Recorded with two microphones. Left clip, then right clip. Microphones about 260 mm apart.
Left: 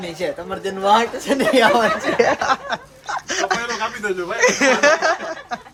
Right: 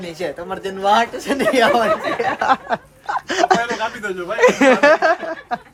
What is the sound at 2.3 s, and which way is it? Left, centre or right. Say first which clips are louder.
Snicker: right 2 dB; centre.